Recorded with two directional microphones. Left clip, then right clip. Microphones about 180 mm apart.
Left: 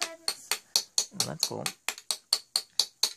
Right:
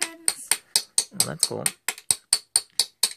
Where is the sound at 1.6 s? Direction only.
20° right (ahead or behind).